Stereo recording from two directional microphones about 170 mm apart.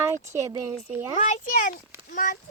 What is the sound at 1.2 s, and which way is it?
Speech, 40° left (ahead or behind).